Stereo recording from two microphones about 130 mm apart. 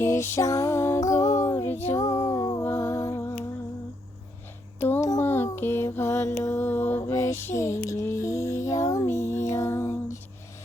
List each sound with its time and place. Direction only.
0.0 s music: 20° left (ahead or behind)
4.8 s a sound: 15° left (ahead or behind)
5.0 s mantra: 20° left (ahead or behind)
9.1 s music: 65° left (ahead or behind)
9.4 s lullaby: 20° left (ahead or behind)